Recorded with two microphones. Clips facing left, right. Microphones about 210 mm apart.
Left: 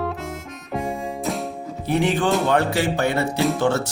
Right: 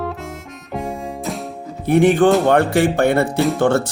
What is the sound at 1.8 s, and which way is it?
Speech, 50° right (ahead or behind).